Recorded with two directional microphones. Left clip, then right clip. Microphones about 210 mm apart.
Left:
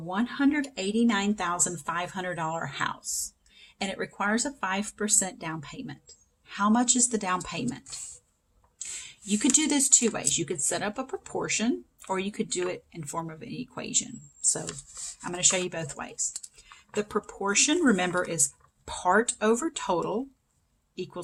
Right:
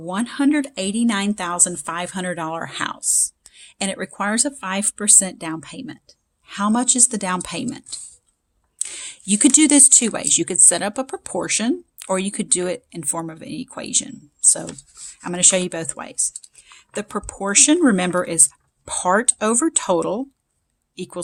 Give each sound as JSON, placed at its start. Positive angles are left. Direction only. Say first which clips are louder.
{"t": 0.1, "sound": "a woman's voice", "louder": "right 6 dB", "side_deg": -55}